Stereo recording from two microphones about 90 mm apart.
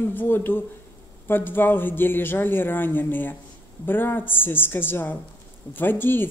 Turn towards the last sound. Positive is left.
turn(degrees=25)  # may be behind; listen again after turning